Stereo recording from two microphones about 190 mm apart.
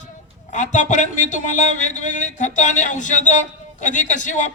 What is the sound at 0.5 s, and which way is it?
A man's voice, 40° left (ahead or behind).